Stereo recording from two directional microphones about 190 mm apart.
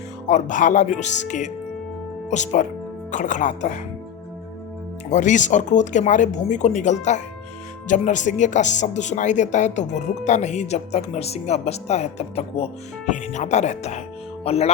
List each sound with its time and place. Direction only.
0.3 s speech: 40° left (ahead or behind)
5.1 s speech: 40° left (ahead or behind)